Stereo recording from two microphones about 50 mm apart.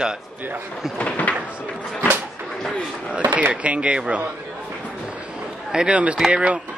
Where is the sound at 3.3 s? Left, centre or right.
Right.